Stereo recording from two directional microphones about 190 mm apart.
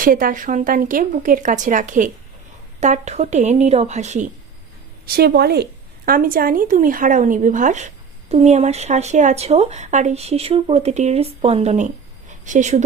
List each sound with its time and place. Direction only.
0.0 s speech: 45° right (ahead or behind)
5.0 s a woman's voice: 55° right (ahead or behind)